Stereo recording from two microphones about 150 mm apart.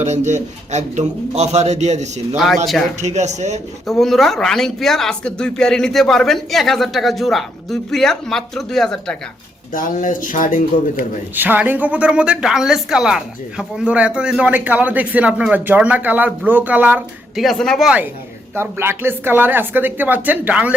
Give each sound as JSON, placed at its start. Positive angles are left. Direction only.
{"t": 0.0, "sound": "a man's voice", "side_deg": -50}
{"t": 2.3, "sound": "speech", "side_deg": 0}
{"t": 3.0, "sound": "a man's voice", "side_deg": -50}
{"t": 3.8, "sound": "speech", "side_deg": 0}
{"t": 9.7, "sound": "speech", "side_deg": 65}
{"t": 11.3, "sound": "a woman's voice", "side_deg": -10}
{"t": 17.4, "sound": "speech", "side_deg": 0}
{"t": 18.5, "sound": "a woman's voice", "side_deg": -15}